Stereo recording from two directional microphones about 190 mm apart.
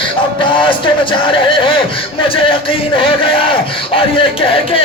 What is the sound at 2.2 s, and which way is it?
A man's voice, 30° left (ahead or behind).